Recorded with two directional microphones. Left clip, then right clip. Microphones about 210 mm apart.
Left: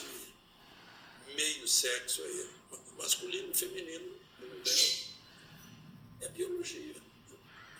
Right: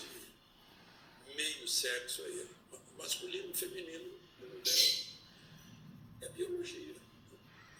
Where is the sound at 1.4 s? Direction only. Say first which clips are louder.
Left 4 dB; 40° left (ahead or behind).